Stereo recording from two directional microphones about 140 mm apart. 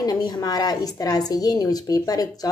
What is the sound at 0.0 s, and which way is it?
Speech, 30° left (ahead or behind).